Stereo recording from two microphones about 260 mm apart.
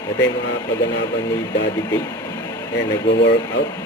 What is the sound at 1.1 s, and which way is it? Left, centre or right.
Speech, centre.